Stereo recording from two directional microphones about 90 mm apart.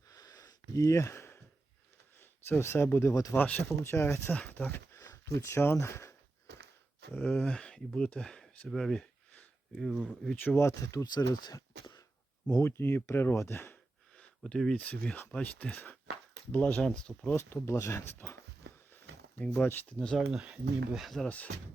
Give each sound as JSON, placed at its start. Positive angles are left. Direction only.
{"t": 0.1, "sound": "a sound", "side_deg": 40}
{"t": 2.5, "sound": "speech", "side_deg": 25}
{"t": 3.3, "sound": "speech", "side_deg": 15}
{"t": 3.8, "sound": "speech", "side_deg": 25}
{"t": 4.9, "sound": "speech", "side_deg": 35}
{"t": 7.1, "sound": "speech", "side_deg": 20}
{"t": 10.6, "sound": "speech", "side_deg": 35}
{"t": 11.0, "sound": "speech", "side_deg": 50}
{"t": 12.5, "sound": "speech", "side_deg": 35}
{"t": 14.2, "sound": "speech", "side_deg": 5}
{"t": 16.8, "sound": "speech", "side_deg": 5}
{"t": 17.3, "sound": "speech", "side_deg": 30}
{"t": 19.4, "sound": "speech", "side_deg": 20}
{"t": 20.1, "sound": "speech", "side_deg": -10}